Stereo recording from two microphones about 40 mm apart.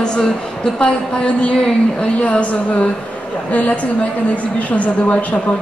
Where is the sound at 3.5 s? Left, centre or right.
Left.